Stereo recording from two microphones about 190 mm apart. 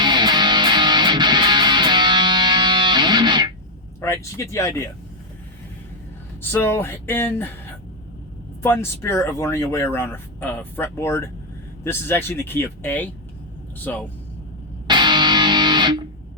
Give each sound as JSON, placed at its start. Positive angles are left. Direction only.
{"t": 0.0, "sound": "music", "side_deg": -25}
{"t": 4.0, "sound": "speech", "side_deg": 15}
{"t": 6.4, "sound": "speech", "side_deg": 10}
{"t": 8.6, "sound": "speech", "side_deg": 10}
{"t": 14.8, "sound": "music", "side_deg": -25}